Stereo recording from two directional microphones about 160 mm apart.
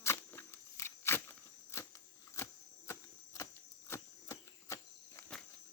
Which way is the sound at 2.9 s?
20° left (ahead or behind).